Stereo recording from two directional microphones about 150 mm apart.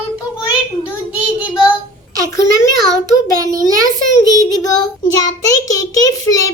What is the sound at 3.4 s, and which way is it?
Speech, 25° right (ahead or behind).